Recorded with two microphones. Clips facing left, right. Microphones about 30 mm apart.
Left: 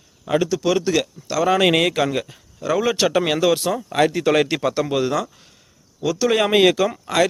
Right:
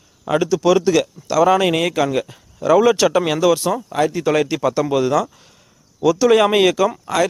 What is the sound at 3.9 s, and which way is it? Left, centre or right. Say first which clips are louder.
Speech: left 2 dB; left.